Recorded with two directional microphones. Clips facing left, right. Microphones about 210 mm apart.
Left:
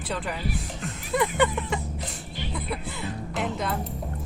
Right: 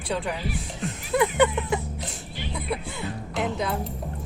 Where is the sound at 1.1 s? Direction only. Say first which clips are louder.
Right 3 dB; centre (ahead or behind).